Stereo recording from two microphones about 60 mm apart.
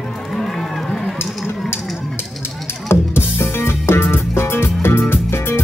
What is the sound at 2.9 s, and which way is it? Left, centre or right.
Music, left.